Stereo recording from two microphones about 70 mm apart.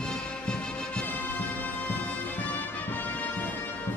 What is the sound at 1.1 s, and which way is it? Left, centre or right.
Music, left.